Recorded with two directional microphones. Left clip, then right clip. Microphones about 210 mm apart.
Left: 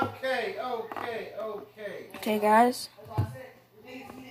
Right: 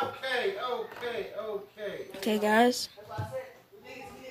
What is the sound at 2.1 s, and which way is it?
Speech, 40° right (ahead or behind).